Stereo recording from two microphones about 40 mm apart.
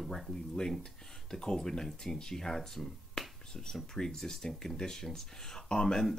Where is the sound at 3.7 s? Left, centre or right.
Centre.